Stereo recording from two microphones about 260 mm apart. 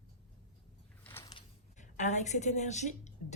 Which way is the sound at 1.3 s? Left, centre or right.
Left.